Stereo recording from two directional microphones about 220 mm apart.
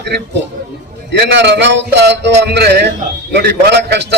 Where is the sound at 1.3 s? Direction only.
50° right (ahead or behind).